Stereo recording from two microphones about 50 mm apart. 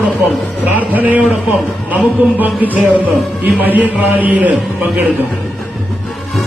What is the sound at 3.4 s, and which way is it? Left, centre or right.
A man's voice, right.